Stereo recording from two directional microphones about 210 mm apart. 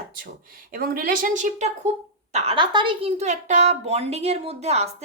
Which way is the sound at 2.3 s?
25° right (ahead or behind).